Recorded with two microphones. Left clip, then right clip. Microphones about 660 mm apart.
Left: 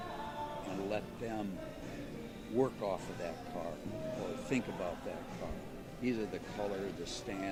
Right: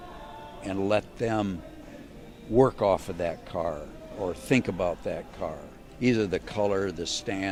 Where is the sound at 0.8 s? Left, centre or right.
Right.